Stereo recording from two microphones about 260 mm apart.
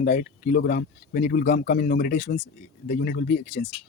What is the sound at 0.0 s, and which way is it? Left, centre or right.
Speech, left.